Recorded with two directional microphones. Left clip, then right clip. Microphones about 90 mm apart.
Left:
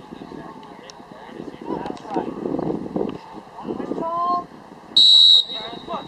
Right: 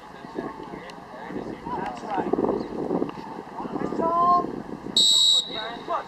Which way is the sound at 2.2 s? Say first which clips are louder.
Left 3 dB; 5° right (ahead or behind).